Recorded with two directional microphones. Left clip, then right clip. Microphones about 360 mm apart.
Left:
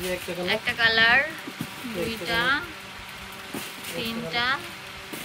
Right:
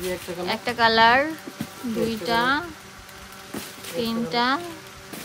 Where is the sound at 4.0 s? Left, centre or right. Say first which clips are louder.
Right 4 dB; centre.